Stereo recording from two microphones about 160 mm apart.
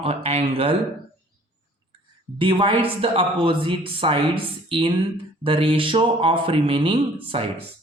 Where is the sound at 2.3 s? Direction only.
30° right (ahead or behind).